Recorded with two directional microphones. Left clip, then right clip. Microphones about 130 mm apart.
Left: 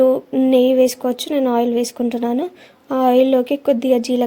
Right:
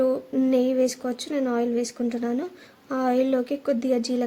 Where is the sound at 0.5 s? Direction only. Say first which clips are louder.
Left 10 dB; 45° left (ahead or behind).